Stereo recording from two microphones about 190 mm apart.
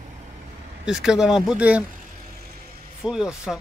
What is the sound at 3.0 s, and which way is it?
Speech, 5° right (ahead or behind).